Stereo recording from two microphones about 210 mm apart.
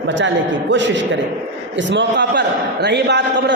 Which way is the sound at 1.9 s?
55° right (ahead or behind).